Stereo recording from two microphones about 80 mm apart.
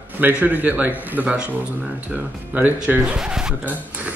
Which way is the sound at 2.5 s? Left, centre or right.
Right.